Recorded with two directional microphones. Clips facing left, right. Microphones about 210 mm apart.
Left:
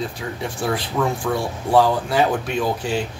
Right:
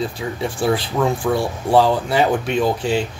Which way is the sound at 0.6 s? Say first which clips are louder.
Right 3 dB; 30° right (ahead or behind).